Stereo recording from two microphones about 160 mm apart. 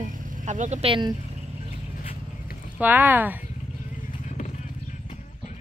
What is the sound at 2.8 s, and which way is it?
Speech, 10° right (ahead or behind).